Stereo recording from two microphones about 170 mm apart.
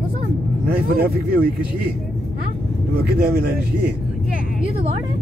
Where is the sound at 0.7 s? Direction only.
65° right (ahead or behind).